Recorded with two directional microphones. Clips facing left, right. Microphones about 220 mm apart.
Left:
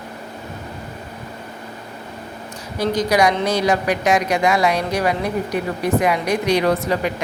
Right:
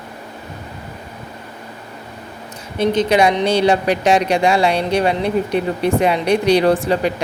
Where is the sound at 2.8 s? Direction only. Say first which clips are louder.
Right 3 dB; 25° right (ahead or behind).